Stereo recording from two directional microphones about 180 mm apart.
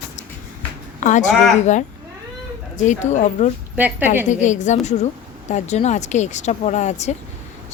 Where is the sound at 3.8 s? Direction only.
10° right (ahead or behind).